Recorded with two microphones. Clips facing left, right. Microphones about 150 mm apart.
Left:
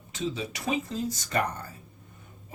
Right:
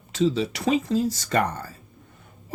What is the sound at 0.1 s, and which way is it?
Speech, 75° right (ahead or behind).